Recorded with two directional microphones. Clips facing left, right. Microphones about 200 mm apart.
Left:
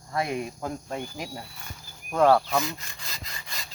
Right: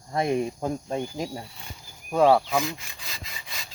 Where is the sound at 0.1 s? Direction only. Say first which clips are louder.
Right 4 dB; 25° right (ahead or behind).